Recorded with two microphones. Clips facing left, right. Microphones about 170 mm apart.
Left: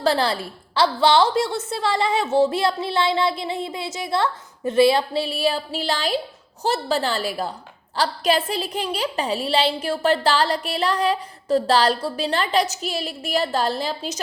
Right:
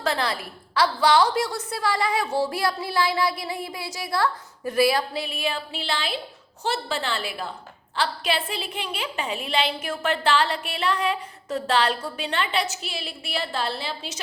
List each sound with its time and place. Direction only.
0.0 s a woman's voice: 30° left (ahead or behind)